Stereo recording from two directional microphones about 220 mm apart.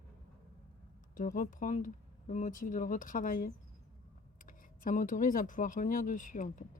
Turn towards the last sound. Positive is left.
turn(degrees=35)  # may be behind; listen again after turning